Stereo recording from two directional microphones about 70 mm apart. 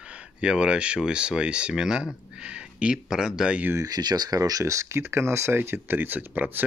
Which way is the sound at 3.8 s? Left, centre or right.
Right.